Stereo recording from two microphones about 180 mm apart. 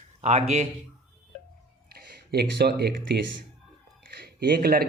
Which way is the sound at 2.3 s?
65° right (ahead or behind).